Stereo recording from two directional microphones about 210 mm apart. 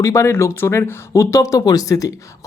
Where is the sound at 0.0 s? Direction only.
15° left (ahead or behind).